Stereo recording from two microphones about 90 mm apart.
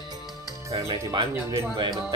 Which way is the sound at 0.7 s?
60° right (ahead or behind).